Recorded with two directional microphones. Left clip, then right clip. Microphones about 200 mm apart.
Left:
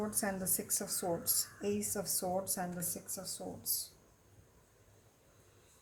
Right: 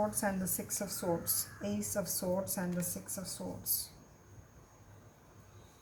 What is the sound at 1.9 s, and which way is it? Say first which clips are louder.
Speech: right 2 dB; 35° left (ahead or behind).